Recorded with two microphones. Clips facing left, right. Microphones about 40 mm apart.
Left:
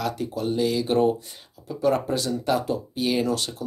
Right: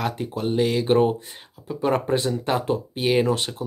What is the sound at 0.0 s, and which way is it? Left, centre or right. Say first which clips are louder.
Speech: right 1 dB; right.